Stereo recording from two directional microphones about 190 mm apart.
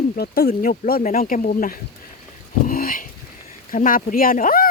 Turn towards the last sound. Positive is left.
turn(degrees=45)  # may be behind; listen again after turning